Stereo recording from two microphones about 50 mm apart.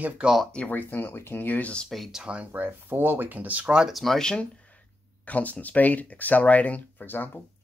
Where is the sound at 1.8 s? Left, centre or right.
Centre.